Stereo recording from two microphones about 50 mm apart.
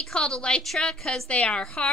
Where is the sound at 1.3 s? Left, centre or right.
Left.